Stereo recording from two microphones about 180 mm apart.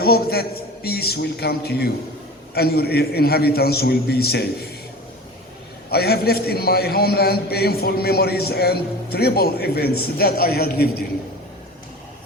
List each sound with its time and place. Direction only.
0.0 s a man's voice: 60° left (ahead or behind)
5.9 s a man's voice: 60° left (ahead or behind)